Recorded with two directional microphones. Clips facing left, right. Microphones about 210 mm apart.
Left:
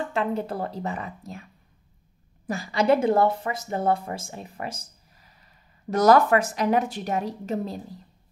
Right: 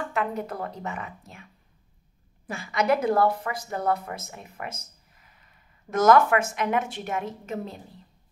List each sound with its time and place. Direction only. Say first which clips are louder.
0.1 s a woman's voice: left 3 dB; 30° left (ahead or behind)
2.4 s a woman's voice: left 3 dB; 35° left (ahead or behind)